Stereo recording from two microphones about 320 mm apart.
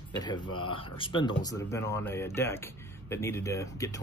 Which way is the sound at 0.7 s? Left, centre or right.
Centre.